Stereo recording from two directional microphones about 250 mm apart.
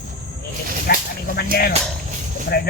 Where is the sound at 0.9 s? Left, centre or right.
Left.